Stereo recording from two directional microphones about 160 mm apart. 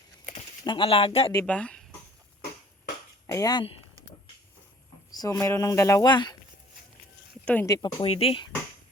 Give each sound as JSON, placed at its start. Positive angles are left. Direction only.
{"t": 0.6, "sound": "speech", "side_deg": 30}
{"t": 1.5, "sound": "speech", "side_deg": 5}
{"t": 3.2, "sound": "speech", "side_deg": 20}
{"t": 5.1, "sound": "speech", "side_deg": 25}
{"t": 7.4, "sound": "speech", "side_deg": 10}
{"t": 7.7, "sound": "speech", "side_deg": 30}